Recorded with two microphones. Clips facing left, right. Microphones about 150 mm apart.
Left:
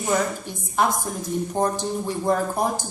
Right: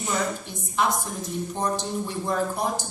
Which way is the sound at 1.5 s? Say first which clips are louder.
Left 3 dB; 50° left (ahead or behind).